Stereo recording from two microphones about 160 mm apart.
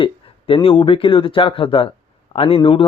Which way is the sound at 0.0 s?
35° left (ahead or behind).